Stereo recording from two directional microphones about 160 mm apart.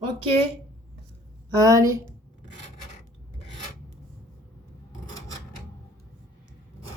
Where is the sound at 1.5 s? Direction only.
20° right (ahead or behind).